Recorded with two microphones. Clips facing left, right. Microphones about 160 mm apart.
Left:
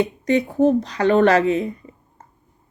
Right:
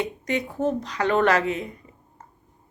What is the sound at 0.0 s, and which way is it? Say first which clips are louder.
Speech: left 7 dB; 30° left (ahead or behind).